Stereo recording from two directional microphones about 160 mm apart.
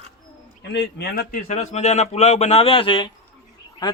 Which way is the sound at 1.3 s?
50° left (ahead or behind).